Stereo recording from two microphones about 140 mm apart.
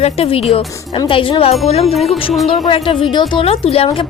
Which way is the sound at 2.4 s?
45° left (ahead or behind).